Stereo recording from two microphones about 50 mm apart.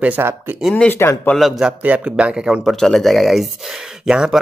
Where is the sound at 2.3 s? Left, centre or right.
Centre.